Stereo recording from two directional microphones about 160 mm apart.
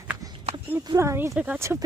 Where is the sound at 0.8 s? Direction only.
20° right (ahead or behind).